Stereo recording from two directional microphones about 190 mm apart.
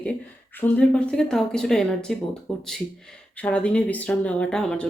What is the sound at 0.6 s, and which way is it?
Speech, 5° left (ahead or behind).